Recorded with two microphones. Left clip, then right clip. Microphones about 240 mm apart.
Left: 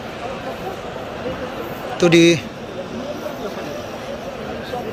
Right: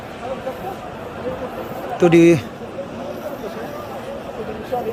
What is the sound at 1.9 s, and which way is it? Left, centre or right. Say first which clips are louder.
Speech: right 1 dB; centre.